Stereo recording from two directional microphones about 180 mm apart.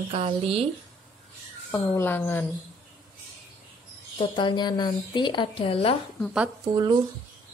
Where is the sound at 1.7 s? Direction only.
10° left (ahead or behind).